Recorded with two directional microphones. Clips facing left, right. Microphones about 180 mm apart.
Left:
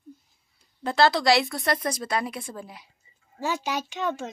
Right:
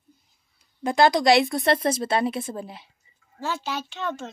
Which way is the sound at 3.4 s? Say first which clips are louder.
Left 1 dB; 10° left (ahead or behind).